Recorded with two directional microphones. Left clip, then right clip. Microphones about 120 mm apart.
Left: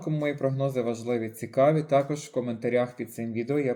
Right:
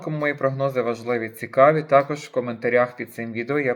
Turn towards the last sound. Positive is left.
turn(degrees=40)  # may be behind; listen again after turning